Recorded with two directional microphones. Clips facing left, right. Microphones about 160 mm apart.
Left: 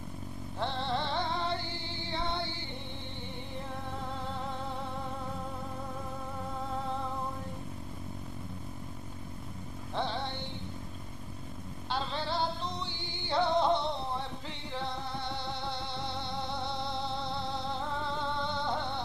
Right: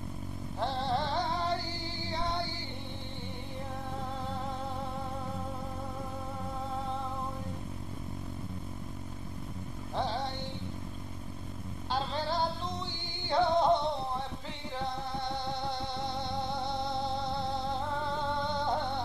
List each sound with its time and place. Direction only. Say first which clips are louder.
0.6 s music: right 2 dB; 40° right (ahead or behind)
9.9 s music: right 1 dB; 40° right (ahead or behind)
11.9 s music: right 1 dB; 40° right (ahead or behind)
15.1 s music: right 2 dB; 45° right (ahead or behind)